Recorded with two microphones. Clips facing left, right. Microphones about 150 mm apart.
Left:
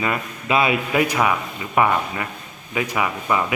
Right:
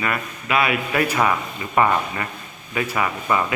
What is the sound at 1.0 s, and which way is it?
Speech, 10° left (ahead or behind).